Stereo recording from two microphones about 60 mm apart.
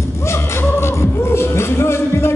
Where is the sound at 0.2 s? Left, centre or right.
Left.